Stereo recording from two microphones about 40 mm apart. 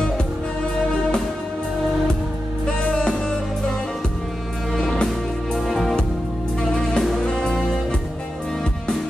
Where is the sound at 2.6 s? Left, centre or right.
Left.